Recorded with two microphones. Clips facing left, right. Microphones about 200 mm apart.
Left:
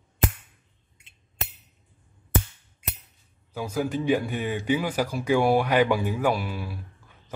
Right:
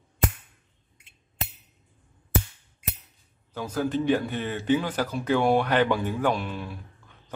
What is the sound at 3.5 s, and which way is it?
Speech, 10° left (ahead or behind).